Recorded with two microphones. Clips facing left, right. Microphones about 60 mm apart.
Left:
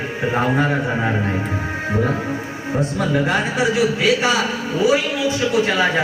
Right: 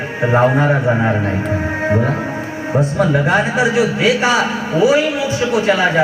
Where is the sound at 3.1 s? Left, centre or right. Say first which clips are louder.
Right 2 dB; right.